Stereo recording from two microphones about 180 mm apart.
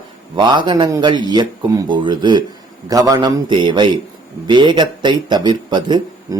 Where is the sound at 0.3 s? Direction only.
25° right (ahead or behind).